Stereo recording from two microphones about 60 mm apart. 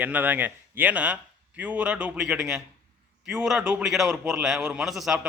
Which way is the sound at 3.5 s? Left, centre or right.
Right.